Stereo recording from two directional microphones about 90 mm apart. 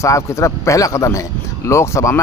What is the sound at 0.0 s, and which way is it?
Speech, 35° left (ahead or behind).